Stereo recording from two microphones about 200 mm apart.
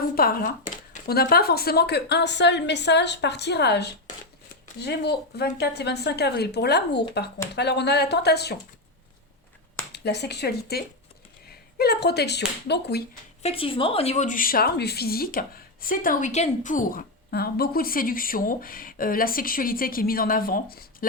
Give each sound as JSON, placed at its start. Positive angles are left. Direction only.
{"t": 0.2, "sound": "speech", "side_deg": 45}
{"t": 9.9, "sound": "speech", "side_deg": 55}
{"t": 13.4, "sound": "a woman's voice", "side_deg": 30}